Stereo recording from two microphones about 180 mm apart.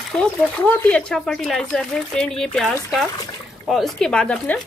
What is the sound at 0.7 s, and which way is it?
Speech, 5° left (ahead or behind).